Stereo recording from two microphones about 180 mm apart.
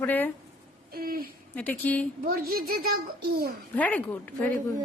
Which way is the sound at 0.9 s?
55° right (ahead or behind).